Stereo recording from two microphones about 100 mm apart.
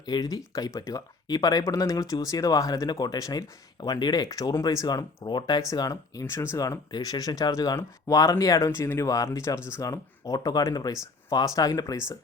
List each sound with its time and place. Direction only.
0.0 s speech: 40° left (ahead or behind)